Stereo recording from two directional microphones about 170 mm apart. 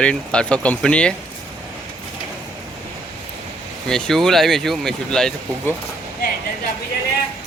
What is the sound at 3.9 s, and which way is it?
Speech, centre (ahead or behind).